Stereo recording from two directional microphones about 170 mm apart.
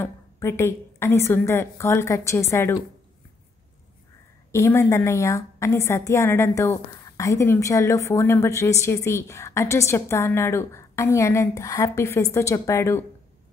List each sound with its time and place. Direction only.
0.0 s a woman's voice: 15° left (ahead or behind)
4.5 s a woman's voice: 15° left (ahead or behind)